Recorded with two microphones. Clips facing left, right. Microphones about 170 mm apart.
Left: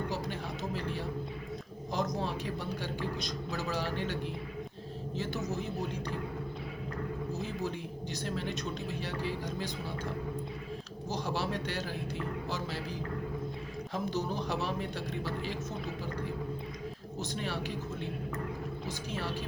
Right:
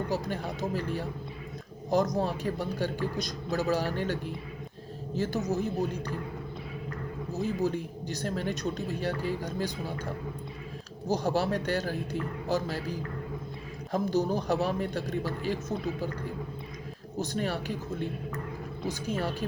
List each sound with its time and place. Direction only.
0.1 s a woman's voice: 45° right (ahead or behind)
7.6 s speech: 40° right (ahead or behind)
11.1 s speech: 45° right (ahead or behind)
13.9 s speech: 40° right (ahead or behind)
17.2 s speech: 45° right (ahead or behind)
19.0 s speech: 45° right (ahead or behind)